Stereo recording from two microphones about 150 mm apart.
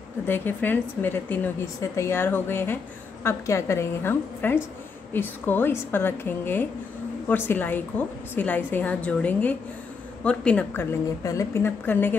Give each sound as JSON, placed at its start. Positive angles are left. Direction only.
{"t": 0.3, "sound": "a woman's voice", "side_deg": 15}